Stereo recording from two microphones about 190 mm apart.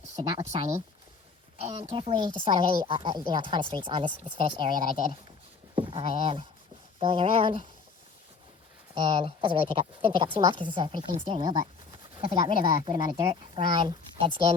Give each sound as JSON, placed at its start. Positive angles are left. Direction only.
{"t": 0.2, "sound": "a woman's voice", "side_deg": -30}
{"t": 9.0, "sound": "a woman's voice", "side_deg": -25}